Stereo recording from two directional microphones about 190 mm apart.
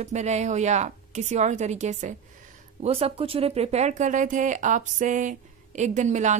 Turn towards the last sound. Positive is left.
turn(degrees=-40)  # may be behind; listen again after turning